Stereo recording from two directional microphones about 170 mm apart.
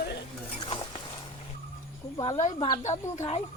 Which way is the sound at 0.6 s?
30° left (ahead or behind).